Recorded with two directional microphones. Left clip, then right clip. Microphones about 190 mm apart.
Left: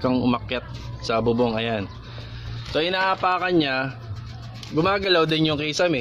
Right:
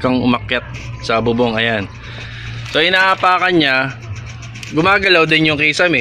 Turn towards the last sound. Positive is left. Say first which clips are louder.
# right 9 dB
turn(degrees=5)  # may be behind; listen again after turning